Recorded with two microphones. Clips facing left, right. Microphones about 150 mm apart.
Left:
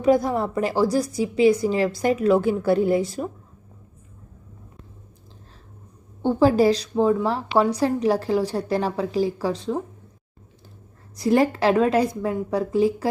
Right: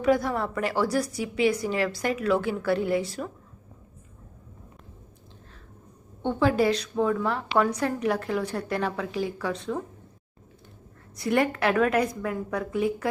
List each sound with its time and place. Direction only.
0.0 s a woman's voice: 40° left (ahead or behind)
6.2 s a woman's voice: 35° left (ahead or behind)
11.2 s a woman's voice: 30° left (ahead or behind)